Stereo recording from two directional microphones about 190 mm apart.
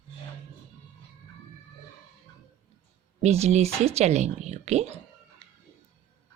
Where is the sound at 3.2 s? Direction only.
35° right (ahead or behind).